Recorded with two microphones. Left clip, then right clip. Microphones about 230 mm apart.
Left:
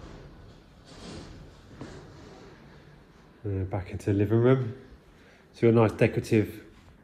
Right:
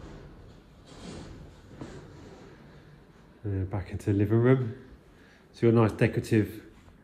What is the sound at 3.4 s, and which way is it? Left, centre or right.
A man's voice, centre.